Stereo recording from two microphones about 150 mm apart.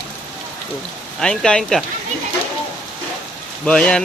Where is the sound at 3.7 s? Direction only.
5° left (ahead or behind).